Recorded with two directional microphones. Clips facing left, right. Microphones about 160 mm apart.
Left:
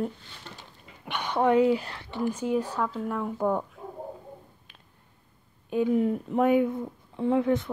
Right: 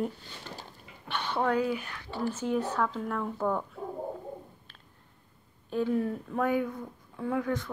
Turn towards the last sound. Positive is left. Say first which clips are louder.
# left 6 dB
turn(degrees=25)  # may be behind; listen again after turning